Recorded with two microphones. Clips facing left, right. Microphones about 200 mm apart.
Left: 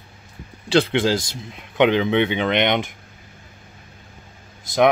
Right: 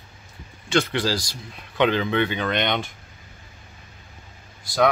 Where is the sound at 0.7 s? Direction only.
30° left (ahead or behind).